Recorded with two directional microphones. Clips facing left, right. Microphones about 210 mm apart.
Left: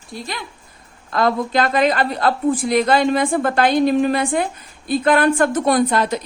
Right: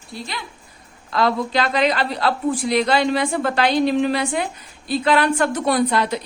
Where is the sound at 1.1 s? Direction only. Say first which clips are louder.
Left 2 dB; 50° left (ahead or behind).